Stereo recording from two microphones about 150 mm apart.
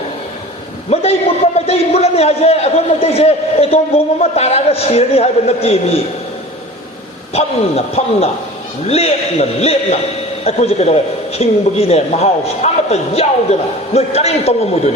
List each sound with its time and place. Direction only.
0.9 s a man's voice: 45° left (ahead or behind)
7.3 s a man's voice: 45° left (ahead or behind)